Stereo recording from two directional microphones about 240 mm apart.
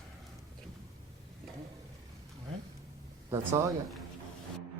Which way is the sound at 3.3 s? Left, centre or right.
Centre.